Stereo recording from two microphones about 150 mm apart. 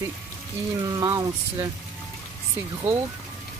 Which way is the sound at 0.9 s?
25° right (ahead or behind).